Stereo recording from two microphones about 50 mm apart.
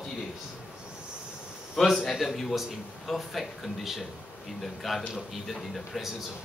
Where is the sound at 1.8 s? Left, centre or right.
Centre.